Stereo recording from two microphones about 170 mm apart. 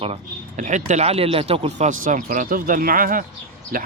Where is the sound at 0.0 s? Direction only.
40° right (ahead or behind).